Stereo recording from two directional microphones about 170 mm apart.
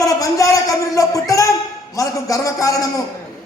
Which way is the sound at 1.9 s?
20° left (ahead or behind).